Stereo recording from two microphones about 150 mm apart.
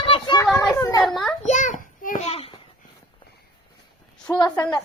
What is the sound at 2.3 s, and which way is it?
Babbling, 40° left (ahead or behind).